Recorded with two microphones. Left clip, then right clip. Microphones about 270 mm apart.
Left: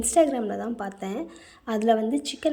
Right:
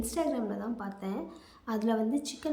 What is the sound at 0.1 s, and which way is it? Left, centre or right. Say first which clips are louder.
A woman's voice: left 12 dB; centre.